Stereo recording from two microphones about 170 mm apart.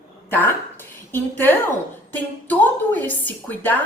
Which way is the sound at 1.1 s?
10° left (ahead or behind).